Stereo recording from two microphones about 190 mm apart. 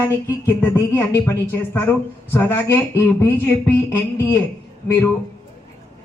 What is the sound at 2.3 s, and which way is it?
A woman's voice, 15° left (ahead or behind).